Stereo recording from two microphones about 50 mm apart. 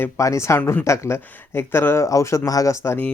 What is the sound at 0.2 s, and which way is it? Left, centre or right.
Speech, left.